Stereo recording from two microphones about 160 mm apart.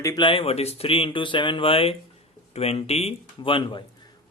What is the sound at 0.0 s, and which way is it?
Speech, 30° left (ahead or behind).